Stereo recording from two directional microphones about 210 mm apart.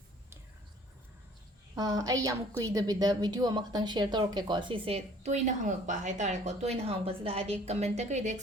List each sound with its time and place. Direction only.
1.7 s a woman's voice: 15° right (ahead or behind); by 8.4 s 35° right (ahead or behind)